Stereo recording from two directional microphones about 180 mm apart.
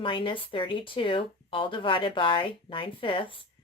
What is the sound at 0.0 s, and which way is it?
Speech, 30° left (ahead or behind).